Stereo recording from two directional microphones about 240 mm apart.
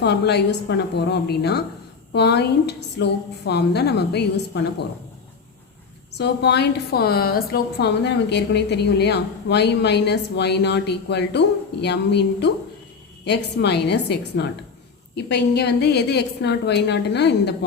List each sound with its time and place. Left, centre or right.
0.0 s a woman's voice: left
6.1 s a woman's voice: left